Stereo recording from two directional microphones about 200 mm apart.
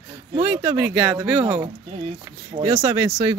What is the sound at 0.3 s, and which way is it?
Speech, 15° right (ahead or behind).